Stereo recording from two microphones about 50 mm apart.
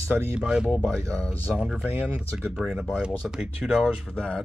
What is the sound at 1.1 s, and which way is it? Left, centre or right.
Speech, left.